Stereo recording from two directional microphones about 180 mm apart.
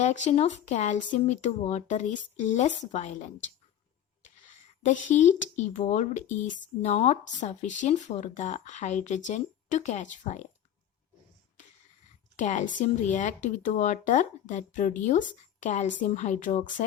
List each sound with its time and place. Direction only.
0.0 s speech: 40° left (ahead or behind)
4.8 s speech: 45° left (ahead or behind)
12.4 s speech: 45° left (ahead or behind)